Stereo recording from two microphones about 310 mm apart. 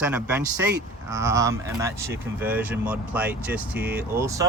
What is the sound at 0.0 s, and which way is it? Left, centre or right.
Speech, centre.